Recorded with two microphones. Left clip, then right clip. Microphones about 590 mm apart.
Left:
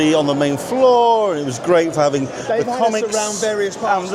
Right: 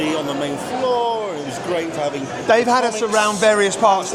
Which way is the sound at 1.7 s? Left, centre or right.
Left.